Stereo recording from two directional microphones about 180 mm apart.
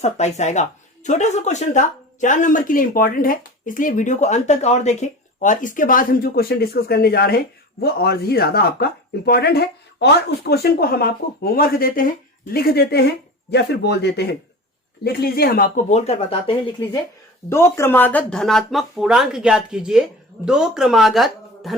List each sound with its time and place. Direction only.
0.0 s speech: 40° left (ahead or behind)
17.5 s speech: 15° left (ahead or behind)